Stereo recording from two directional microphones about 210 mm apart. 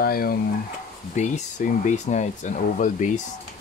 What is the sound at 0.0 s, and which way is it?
Speech, 45° left (ahead or behind).